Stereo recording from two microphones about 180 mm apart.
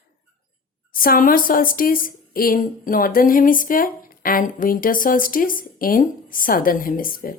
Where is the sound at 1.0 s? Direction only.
50° left (ahead or behind).